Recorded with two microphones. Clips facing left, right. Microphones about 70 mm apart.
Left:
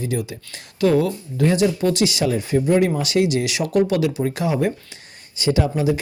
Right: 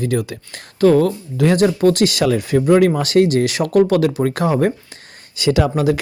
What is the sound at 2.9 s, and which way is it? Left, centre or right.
Speech, right.